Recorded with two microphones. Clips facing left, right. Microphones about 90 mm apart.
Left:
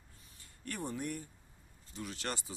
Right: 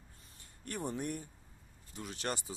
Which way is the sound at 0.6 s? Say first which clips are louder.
Right 1 dB; 20° right (ahead or behind).